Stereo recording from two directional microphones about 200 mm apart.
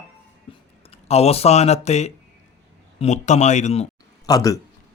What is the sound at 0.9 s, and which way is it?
Speech, 30° left (ahead or behind).